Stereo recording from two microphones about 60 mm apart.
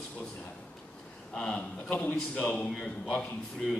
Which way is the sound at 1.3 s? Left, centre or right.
Centre.